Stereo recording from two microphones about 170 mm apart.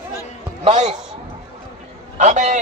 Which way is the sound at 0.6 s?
40° right (ahead or behind).